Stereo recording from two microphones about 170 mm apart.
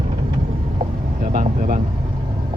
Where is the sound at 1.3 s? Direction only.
45° right (ahead or behind).